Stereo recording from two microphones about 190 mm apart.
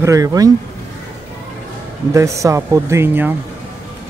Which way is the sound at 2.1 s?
15° right (ahead or behind).